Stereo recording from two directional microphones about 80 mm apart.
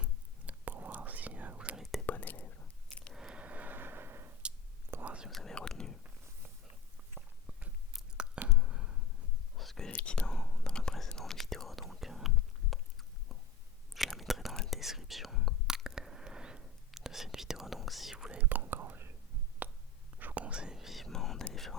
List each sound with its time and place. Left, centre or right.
0.0 s whispering: centre
1.8 s whispering: centre
2.0 s whispering: left
3.1 s a sound: centre; by 4.3 s right
4.9 s whispering: right
5.3 s whispering: centre
7.9 s chewing: centre
8.5 s a sound: centre
9.6 s whispering: centre
9.9 s whispering: centre
12.7 s a sound: centre
14.5 s whispering: centre
14.8 s whispering: centre
18.3 s whispering: right; by 21.8 s centre